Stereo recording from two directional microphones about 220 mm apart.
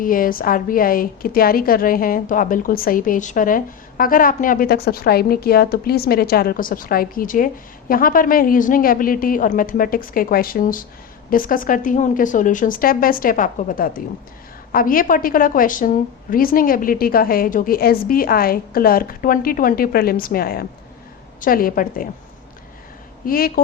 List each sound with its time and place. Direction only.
0.0 s a woman's voice: 40° left (ahead or behind)
23.2 s a woman's voice: 40° left (ahead or behind)